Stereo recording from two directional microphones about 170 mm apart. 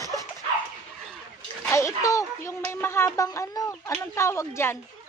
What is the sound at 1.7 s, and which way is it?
Speech, 20° left (ahead or behind).